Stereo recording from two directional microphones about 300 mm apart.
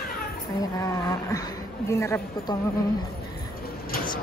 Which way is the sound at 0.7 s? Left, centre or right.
Centre.